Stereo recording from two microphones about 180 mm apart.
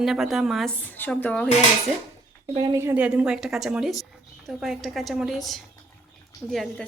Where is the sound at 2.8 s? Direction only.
10° right (ahead or behind).